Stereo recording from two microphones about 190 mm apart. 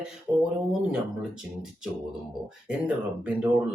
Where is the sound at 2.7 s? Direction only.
5° right (ahead or behind).